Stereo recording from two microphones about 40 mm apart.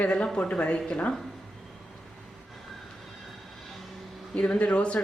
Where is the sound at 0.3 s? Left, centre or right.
Left.